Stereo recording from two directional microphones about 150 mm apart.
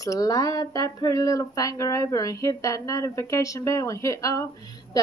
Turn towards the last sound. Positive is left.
turn(degrees=20)  # may be behind; listen again after turning